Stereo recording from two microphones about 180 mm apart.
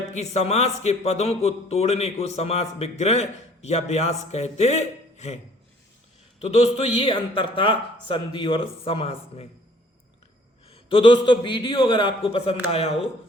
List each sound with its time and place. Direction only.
0.1 s speech: 40° left (ahead or behind)
6.4 s speech: 35° left (ahead or behind)
10.7 s a man's voice: 30° left (ahead or behind)